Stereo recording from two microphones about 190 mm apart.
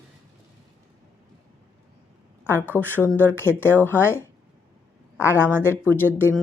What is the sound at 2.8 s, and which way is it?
A woman's voice, 10° left (ahead or behind).